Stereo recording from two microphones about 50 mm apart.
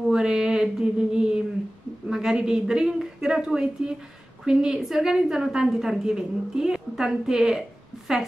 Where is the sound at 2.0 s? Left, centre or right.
Centre.